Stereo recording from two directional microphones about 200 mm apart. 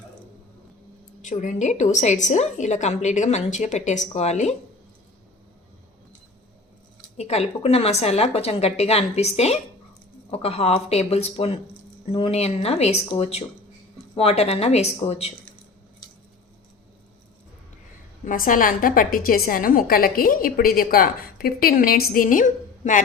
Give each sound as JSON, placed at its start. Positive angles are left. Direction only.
{"t": 1.2, "sound": "a woman's voice", "side_deg": 40}
{"t": 7.2, "sound": "a woman's voice", "side_deg": 30}
{"t": 18.3, "sound": "a woman's voice", "side_deg": 45}